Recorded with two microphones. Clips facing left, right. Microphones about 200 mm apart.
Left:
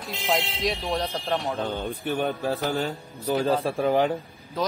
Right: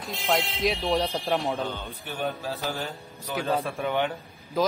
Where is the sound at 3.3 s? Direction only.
35° left (ahead or behind).